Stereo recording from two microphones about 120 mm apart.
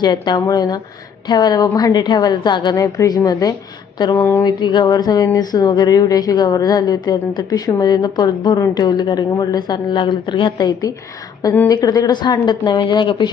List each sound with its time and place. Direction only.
0.0 s speech: 35° left (ahead or behind)
2.8 s a woman's voice: 25° left (ahead or behind)
4.1 s a woman's voice: 20° left (ahead or behind)
4.4 s speech: 35° left (ahead or behind)